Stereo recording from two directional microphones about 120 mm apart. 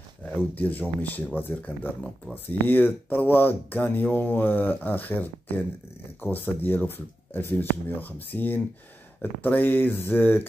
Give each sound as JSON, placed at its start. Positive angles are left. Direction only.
{"t": 0.2, "sound": "speech", "side_deg": 15}